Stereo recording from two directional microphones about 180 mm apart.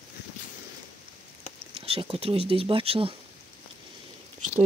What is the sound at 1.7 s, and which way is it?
Speech, 30° right (ahead or behind).